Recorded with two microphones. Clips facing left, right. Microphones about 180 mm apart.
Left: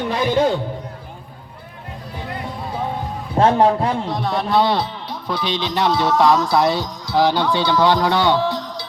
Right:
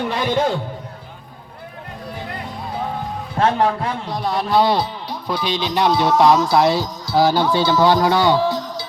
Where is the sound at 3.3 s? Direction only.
30° left (ahead or behind).